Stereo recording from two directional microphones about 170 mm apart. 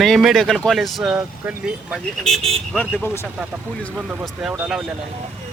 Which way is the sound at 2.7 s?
10° left (ahead or behind).